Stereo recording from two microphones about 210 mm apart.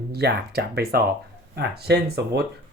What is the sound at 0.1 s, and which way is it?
Speech, 50° right (ahead or behind).